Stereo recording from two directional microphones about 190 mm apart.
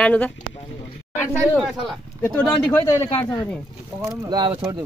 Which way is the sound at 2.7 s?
15° left (ahead or behind).